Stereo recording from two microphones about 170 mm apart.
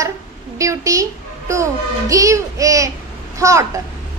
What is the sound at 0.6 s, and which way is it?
A child's voice, 20° right (ahead or behind).